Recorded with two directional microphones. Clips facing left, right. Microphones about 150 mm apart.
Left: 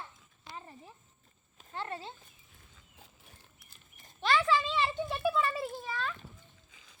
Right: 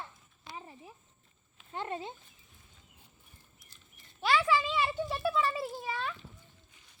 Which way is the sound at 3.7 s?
45° left (ahead or behind).